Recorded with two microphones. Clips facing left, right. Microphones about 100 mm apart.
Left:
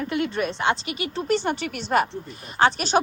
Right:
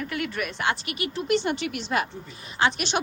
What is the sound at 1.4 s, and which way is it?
A woman's voice, 45° left (ahead or behind).